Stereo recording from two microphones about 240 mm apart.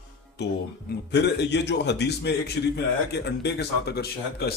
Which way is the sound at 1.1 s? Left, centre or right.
Left.